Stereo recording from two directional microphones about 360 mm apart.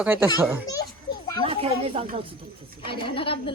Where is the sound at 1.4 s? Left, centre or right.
Centre.